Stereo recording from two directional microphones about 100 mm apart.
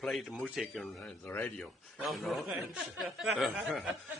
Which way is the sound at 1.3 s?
20° left (ahead or behind).